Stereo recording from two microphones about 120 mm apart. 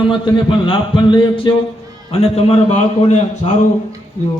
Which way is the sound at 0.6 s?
45° left (ahead or behind).